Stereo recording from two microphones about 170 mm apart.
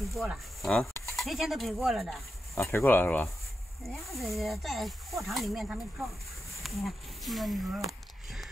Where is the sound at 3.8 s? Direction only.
Centre (ahead or behind).